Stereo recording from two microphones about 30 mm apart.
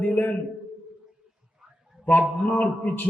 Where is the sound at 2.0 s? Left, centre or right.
Left.